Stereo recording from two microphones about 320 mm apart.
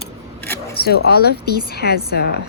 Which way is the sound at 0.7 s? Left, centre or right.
Left.